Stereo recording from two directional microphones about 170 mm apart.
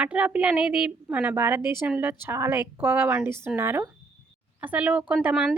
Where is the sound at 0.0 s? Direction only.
5° right (ahead or behind).